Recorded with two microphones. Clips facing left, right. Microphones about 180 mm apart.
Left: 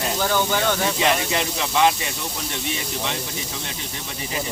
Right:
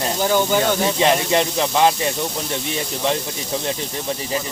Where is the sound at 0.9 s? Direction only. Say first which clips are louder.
Right 5 dB; 35° right (ahead or behind).